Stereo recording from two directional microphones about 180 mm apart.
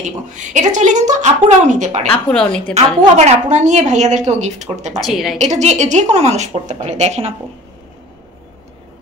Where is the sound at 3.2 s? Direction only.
40° right (ahead or behind).